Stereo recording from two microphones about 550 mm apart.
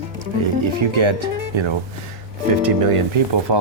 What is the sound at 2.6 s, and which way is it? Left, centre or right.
Speech, right.